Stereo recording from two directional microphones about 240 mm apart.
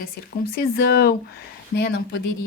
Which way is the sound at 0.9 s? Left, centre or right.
Left.